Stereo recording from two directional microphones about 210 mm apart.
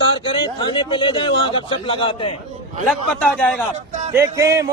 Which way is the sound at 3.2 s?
5° left (ahead or behind).